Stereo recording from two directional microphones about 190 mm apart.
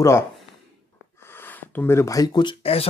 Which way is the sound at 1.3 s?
10° left (ahead or behind).